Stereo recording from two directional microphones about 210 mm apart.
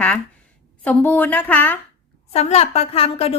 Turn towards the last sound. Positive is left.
turn(degrees=30)  # may be behind; listen again after turning